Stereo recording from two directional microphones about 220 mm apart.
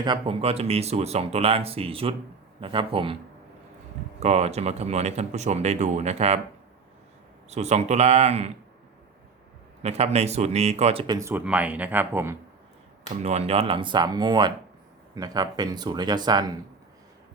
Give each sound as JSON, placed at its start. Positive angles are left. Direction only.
{"t": 0.0, "sound": "speech", "side_deg": -25}
{"t": 4.2, "sound": "speech", "side_deg": -30}
{"t": 7.5, "sound": "speech", "side_deg": -30}
{"t": 9.8, "sound": "speech", "side_deg": -30}
{"t": 13.2, "sound": "speech", "side_deg": -30}